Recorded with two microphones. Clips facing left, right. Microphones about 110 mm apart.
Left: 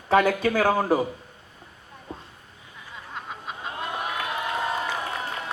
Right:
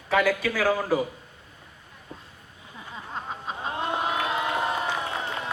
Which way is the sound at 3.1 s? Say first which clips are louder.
Right 2 dB; 30° right (ahead or behind).